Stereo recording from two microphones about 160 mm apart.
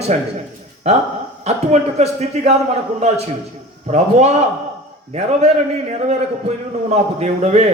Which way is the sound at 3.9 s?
45° right (ahead or behind).